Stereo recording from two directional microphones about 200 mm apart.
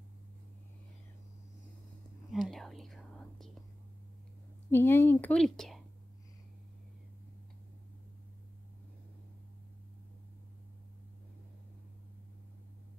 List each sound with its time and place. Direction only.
2.3 s whispering: centre (ahead or behind)
4.6 s a woman's voice: 10° left (ahead or behind)